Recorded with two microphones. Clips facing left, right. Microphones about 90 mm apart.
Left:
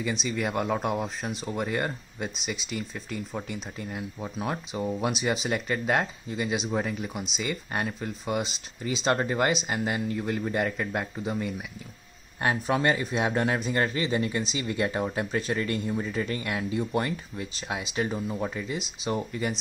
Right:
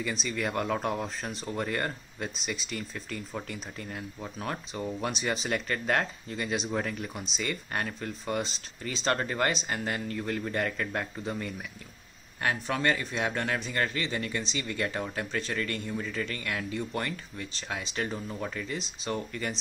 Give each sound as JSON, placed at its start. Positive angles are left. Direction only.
{"t": 0.0, "sound": "a man's voice", "side_deg": 5}
{"t": 12.4, "sound": "a man's voice", "side_deg": 20}